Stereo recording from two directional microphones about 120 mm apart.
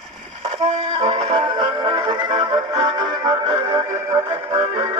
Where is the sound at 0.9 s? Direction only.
50° right (ahead or behind).